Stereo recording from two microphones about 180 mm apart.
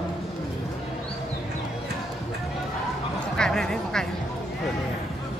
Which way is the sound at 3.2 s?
5° left (ahead or behind).